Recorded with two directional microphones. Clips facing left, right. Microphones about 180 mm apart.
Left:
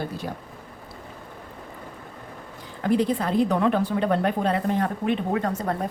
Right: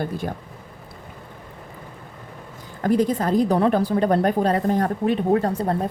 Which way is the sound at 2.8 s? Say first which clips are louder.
Right 2 dB; 45° right (ahead or behind).